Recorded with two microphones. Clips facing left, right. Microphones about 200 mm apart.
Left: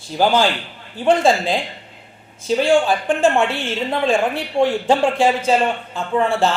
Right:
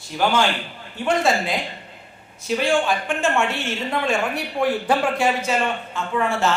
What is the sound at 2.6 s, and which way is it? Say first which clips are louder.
A woman's voice: left 5 dB; 35° left (ahead or behind).